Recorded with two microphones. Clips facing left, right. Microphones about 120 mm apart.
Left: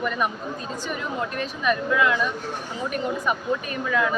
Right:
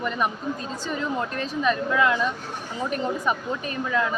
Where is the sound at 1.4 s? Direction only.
30° right (ahead or behind).